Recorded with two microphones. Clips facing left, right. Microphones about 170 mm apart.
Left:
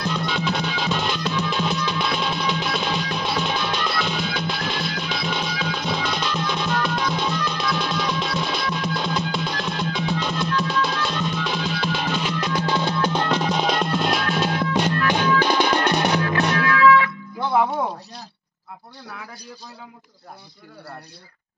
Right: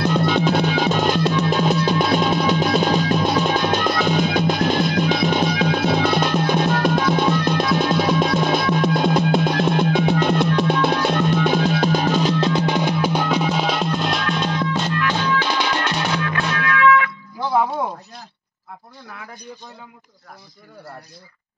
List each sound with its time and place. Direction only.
0.1 s music: 50° right (ahead or behind); by 14.9 s 10° left (ahead or behind)
15.4 s music: 40° left (ahead or behind)